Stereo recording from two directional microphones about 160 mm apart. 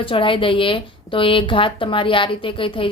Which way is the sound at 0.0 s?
35° left (ahead or behind).